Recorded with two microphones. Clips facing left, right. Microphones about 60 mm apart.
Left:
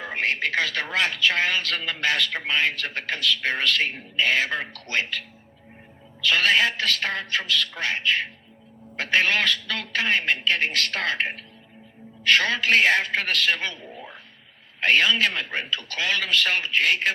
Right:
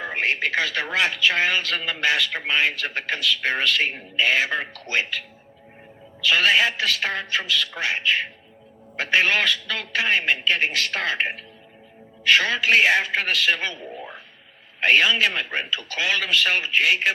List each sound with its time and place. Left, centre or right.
0.0 s a man's voice: right
6.2 s a man's voice: right
12.4 s a man's voice: right